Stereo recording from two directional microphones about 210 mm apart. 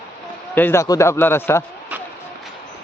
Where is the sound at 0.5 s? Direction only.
10° left (ahead or behind).